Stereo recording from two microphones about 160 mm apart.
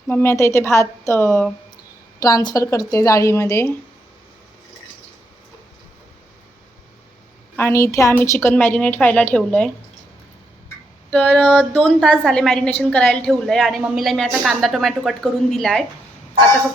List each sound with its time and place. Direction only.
0.1 s a woman's voice: 15° left (ahead or behind)
7.5 s a woman's voice: 15° left (ahead or behind)
11.1 s a sound: 10° left (ahead or behind)
11.5 s a woman's voice: 5° left (ahead or behind)